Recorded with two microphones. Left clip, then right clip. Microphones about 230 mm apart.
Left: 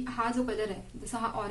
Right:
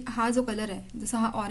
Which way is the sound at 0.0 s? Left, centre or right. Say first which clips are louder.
Right 4 dB; right.